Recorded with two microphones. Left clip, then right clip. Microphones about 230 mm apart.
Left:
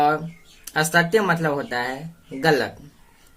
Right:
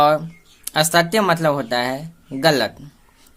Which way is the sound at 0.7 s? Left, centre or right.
Right.